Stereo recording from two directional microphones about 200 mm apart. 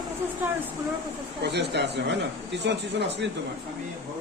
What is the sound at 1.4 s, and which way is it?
Speech, 55° right (ahead or behind).